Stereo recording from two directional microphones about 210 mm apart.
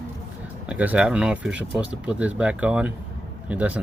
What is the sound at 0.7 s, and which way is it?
Speech, 5° right (ahead or behind).